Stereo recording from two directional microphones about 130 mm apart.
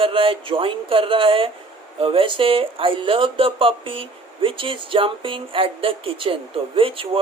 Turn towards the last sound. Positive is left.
turn(degrees=-45)  # may be behind; listen again after turning